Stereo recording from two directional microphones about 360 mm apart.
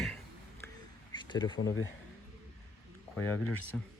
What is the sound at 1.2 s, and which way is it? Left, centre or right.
Speech, centre.